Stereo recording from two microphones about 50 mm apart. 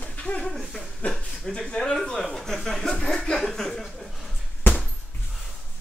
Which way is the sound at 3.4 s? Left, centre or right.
Centre.